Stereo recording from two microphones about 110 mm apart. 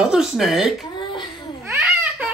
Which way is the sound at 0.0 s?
5° right (ahead or behind).